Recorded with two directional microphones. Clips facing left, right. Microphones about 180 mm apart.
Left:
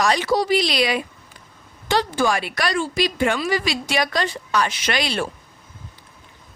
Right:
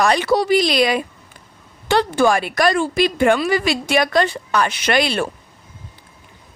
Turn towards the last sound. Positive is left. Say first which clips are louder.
# right 5 dB
turn(degrees=-55)  # may be behind; listen again after turning